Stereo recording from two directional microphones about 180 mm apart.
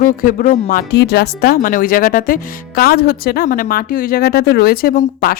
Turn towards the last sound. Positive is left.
turn(degrees=55)  # may be behind; listen again after turning